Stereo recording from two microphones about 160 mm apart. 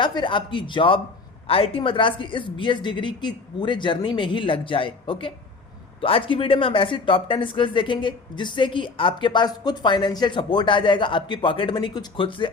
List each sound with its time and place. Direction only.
0.0 s speech: 30° left (ahead or behind)